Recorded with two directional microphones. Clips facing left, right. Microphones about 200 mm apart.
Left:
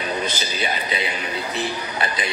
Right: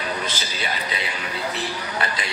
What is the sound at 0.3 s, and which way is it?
Speech, 20° left (ahead or behind).